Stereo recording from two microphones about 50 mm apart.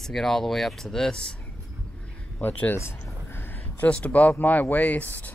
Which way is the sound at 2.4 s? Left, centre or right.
Left.